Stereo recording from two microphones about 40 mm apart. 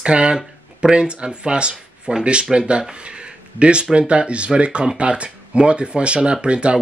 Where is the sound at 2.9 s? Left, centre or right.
Right.